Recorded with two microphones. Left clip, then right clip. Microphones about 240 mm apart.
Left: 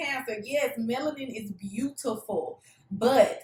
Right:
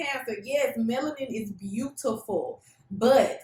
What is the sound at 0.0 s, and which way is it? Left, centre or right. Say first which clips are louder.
Speech: even; centre.